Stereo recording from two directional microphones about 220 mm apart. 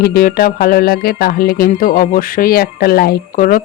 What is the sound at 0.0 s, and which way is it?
Speech, 45° left (ahead or behind).